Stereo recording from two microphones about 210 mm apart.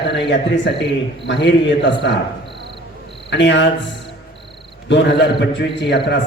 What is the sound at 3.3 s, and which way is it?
Speech, 55° left (ahead or behind).